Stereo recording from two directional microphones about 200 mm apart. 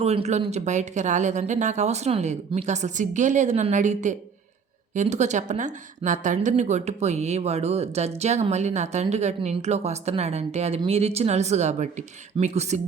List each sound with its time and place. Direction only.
0.0 s a woman's voice: 30° right (ahead or behind)